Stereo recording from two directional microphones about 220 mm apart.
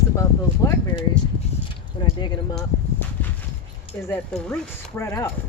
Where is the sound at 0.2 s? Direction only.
15° left (ahead or behind).